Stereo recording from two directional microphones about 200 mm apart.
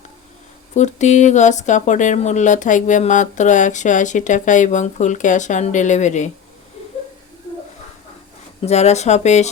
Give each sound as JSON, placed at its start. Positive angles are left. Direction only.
{"t": 0.7, "sound": "speech", "side_deg": 35}
{"t": 8.6, "sound": "speech", "side_deg": 35}